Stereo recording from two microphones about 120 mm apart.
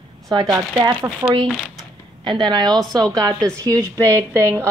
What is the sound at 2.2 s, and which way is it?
Speech, 40° right (ahead or behind).